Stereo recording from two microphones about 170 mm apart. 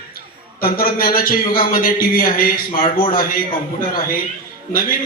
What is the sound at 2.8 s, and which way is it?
Speech, 30° left (ahead or behind).